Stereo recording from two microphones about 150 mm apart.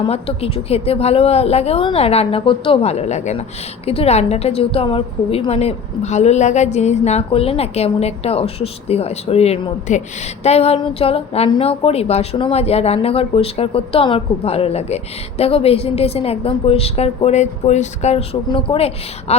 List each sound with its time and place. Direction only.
0.0 s a woman's voice: 40° left (ahead or behind)
18.5 s a woman's voice: 35° left (ahead or behind)